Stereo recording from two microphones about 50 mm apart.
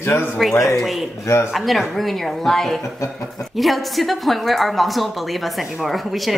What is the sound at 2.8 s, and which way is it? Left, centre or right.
Speech, left.